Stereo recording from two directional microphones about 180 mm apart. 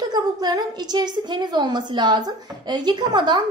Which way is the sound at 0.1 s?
20° right (ahead or behind).